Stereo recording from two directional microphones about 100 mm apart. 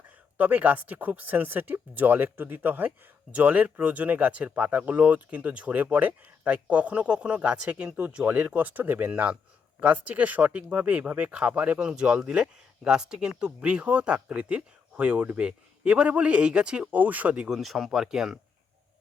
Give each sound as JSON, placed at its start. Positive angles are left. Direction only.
{"t": 0.3, "sound": "speech", "side_deg": -15}
{"t": 17.6, "sound": "speech", "side_deg": 0}